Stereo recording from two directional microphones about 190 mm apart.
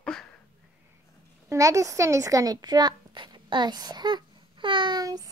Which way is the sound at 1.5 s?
15° right (ahead or behind).